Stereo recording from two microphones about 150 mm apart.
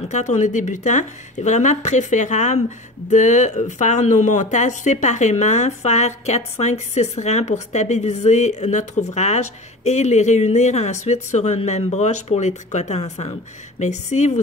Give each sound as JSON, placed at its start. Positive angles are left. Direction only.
{"t": 0.1, "sound": "speech", "side_deg": 50}